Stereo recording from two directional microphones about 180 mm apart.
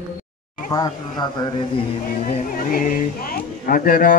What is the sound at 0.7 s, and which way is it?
Mantra, 25° left (ahead or behind).